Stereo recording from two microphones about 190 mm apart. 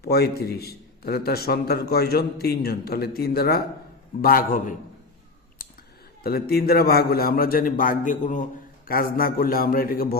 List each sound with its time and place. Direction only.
0.0 s a man's voice: 55° left (ahead or behind)
5.6 s a sound: 50° left (ahead or behind)
6.2 s a man's voice: 55° left (ahead or behind)